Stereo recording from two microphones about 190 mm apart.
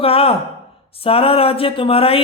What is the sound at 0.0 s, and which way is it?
A man's voice, 30° left (ahead or behind).